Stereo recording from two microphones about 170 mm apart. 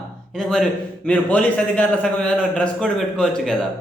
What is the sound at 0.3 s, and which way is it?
A man's voice, 5° left (ahead or behind).